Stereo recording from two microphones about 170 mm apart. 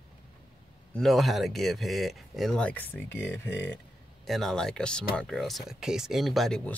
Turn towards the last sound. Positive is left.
turn(degrees=0)  # may be behind; listen again after turning